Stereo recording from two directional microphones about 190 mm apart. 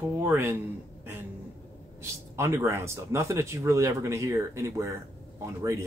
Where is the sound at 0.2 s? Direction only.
10° right (ahead or behind).